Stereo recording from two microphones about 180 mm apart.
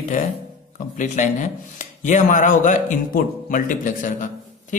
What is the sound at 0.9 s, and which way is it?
Speech, 45° left (ahead or behind).